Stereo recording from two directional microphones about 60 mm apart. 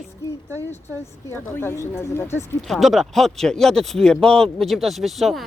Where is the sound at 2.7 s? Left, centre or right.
Centre.